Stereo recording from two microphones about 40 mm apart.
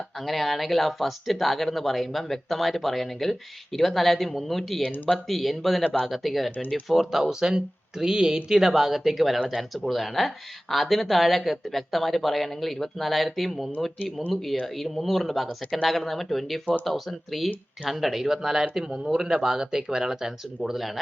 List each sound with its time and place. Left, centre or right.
0.2 s speech: centre
4.8 s speech: left
5.1 s speech: centre
14.8 s speech: centre